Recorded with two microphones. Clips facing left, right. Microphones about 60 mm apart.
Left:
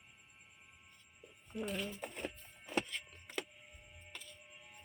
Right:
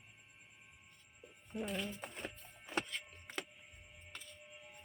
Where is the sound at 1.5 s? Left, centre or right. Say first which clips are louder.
Even; right.